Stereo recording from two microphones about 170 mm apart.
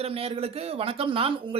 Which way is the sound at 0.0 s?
35° right (ahead or behind).